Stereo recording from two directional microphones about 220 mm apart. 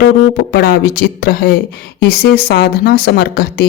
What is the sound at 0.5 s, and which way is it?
Speech, 45° left (ahead or behind).